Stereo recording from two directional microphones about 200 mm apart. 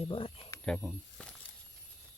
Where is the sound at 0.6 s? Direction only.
Centre (ahead or behind).